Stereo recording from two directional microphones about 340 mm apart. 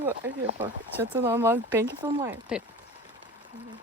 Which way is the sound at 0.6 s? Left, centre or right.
Centre.